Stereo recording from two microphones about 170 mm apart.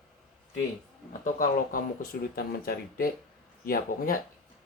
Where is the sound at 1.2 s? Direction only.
55° left (ahead or behind).